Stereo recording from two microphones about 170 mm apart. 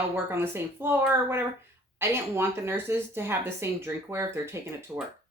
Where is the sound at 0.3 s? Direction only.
15° right (ahead or behind).